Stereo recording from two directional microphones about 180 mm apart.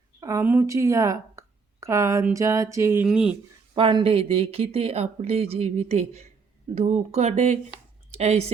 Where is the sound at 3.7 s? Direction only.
25° right (ahead or behind).